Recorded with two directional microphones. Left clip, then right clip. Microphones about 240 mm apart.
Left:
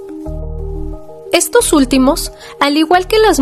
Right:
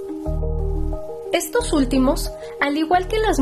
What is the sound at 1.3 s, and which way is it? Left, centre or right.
A woman's voice, left.